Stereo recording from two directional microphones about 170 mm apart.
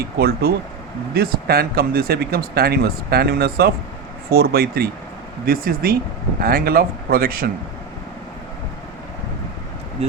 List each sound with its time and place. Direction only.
0.2 s speech: 65° right (ahead or behind)
10.0 s speech: 40° right (ahead or behind)